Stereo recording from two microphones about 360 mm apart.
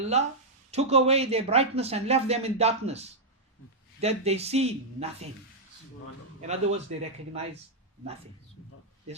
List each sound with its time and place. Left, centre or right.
0.1 s speech: centre
6.5 s speech: centre